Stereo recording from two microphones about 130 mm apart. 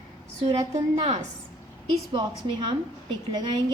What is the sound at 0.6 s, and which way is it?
Speech, 30° right (ahead or behind).